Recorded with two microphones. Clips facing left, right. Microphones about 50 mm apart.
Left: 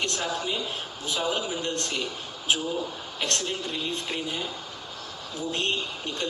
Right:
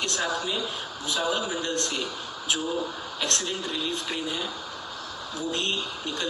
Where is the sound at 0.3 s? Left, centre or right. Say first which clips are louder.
Right 1 dB; left.